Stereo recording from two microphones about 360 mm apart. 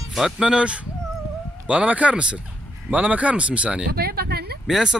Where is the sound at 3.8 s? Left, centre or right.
Right.